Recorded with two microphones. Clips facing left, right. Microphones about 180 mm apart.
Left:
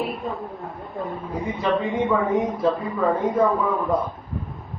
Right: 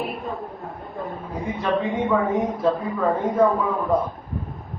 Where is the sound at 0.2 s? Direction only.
Centre (ahead or behind).